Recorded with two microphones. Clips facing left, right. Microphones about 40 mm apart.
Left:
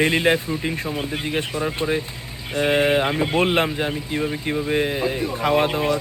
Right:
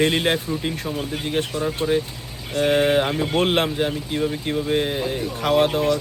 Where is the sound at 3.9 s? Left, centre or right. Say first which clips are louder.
Even; centre.